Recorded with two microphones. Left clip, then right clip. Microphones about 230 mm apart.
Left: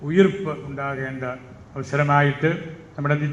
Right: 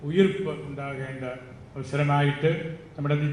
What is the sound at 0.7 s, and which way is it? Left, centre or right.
Speech, left.